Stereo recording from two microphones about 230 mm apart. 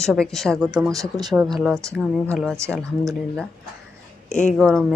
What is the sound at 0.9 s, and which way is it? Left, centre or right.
Speech, centre.